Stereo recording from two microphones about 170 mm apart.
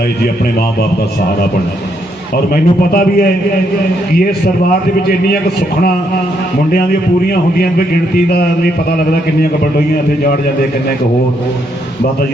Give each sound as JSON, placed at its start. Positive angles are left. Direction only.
{"t": 2.3, "sound": "a man's voice", "side_deg": 60}
{"t": 8.3, "sound": "a man's voice", "side_deg": 65}